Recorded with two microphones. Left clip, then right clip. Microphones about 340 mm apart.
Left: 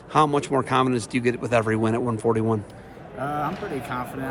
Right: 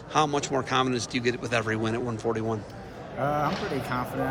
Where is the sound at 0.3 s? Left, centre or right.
Centre.